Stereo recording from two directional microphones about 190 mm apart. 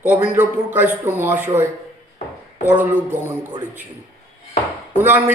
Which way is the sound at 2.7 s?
40° right (ahead or behind).